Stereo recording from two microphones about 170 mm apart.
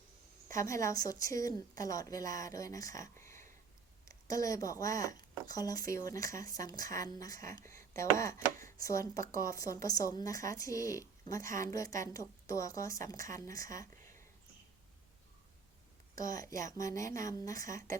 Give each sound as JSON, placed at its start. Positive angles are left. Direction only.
{"t": 0.4, "sound": "speech", "side_deg": 15}
{"t": 16.1, "sound": "speech", "side_deg": 20}